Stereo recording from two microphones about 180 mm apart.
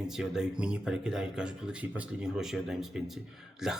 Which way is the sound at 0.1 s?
5° right (ahead or behind).